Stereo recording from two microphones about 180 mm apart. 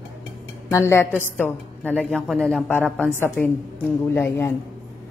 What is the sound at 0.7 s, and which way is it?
A woman's voice, 15° left (ahead or behind).